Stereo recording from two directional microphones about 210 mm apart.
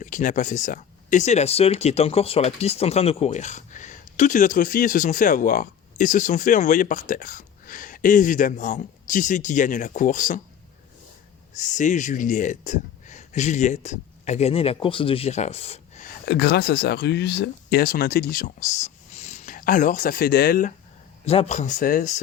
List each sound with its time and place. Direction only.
0.0 s speech: 40° left (ahead or behind)
11.5 s speech: 35° left (ahead or behind)
16.2 s speech: 50° left (ahead or behind)
21.2 s speech: 30° left (ahead or behind)